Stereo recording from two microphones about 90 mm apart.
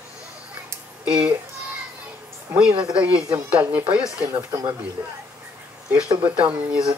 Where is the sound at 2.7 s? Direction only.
70° right (ahead or behind).